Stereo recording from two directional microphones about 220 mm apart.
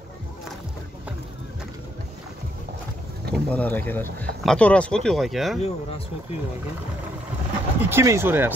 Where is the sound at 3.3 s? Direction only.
5° left (ahead or behind).